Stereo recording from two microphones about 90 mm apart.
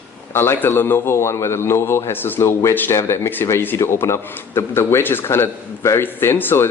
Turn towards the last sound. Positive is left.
turn(degrees=25)  # may be behind; listen again after turning